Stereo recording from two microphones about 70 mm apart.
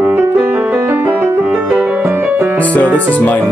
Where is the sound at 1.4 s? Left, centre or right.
Centre.